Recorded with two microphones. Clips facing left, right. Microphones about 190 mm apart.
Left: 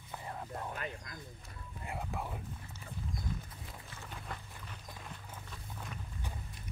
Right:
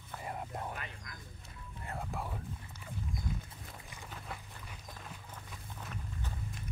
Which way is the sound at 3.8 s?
15° right (ahead or behind).